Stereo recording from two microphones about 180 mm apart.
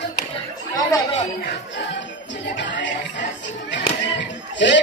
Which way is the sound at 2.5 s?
90° left.